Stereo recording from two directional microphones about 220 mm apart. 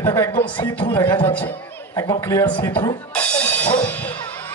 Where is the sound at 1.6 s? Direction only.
10° left (ahead or behind).